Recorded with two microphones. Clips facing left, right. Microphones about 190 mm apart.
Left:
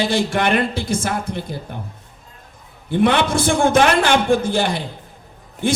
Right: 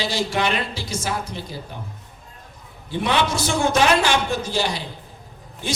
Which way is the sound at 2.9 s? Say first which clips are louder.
Left 5 dB; 55° left (ahead or behind).